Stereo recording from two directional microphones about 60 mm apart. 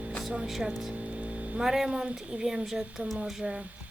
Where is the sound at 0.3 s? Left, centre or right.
Centre.